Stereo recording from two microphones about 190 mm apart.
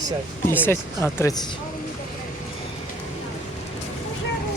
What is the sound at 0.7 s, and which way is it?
Speech, 15° left (ahead or behind).